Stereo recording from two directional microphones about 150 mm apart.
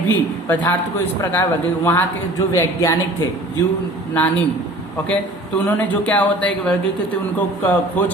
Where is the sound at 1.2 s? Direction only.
15° left (ahead or behind).